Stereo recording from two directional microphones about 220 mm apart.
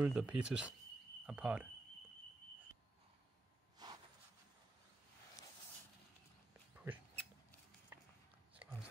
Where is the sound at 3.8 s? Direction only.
20° right (ahead or behind).